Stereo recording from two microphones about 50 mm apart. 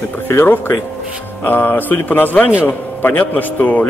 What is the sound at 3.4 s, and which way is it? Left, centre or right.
Speech, left.